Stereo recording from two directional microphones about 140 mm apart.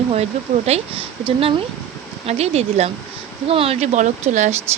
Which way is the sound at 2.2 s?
50° right (ahead or behind).